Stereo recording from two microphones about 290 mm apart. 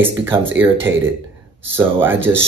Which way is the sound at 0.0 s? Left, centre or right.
Centre.